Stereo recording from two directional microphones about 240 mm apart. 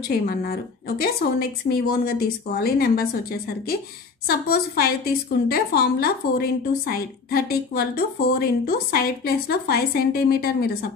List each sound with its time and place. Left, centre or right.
0.5 s a woman's voice: left
4.3 s a woman's voice: left